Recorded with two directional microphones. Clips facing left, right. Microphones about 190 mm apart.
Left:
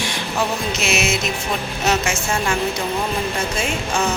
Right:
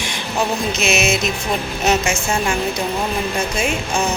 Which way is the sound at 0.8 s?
20° right (ahead or behind).